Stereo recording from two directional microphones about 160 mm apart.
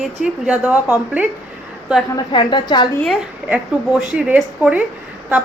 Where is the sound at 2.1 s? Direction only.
30° left (ahead or behind).